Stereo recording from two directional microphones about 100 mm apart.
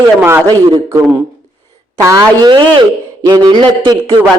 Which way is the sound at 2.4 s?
55° right (ahead or behind).